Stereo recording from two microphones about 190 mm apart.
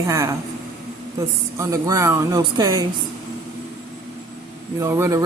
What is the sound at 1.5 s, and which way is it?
Speech, 15° right (ahead or behind).